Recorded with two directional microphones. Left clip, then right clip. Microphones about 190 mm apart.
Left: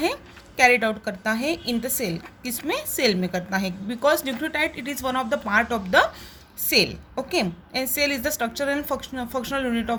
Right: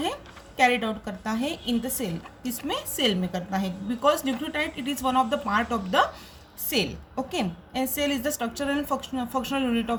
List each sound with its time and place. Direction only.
0.7 s a woman's voice: 45° left (ahead or behind)